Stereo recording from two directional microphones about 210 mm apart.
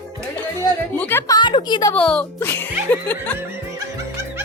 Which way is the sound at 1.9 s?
5° left (ahead or behind).